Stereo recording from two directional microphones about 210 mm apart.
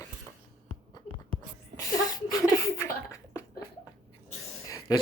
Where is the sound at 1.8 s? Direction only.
15° left (ahead or behind).